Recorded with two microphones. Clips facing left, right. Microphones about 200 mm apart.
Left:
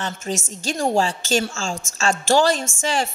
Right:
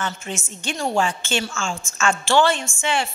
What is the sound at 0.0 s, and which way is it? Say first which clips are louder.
A woman's voice: left 2 dB; 40° left (ahead or behind).